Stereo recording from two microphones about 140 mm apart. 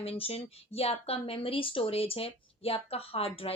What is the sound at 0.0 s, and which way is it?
Speech, 45° left (ahead or behind).